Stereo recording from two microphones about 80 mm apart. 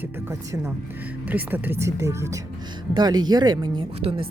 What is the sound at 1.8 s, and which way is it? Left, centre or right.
Speech, right.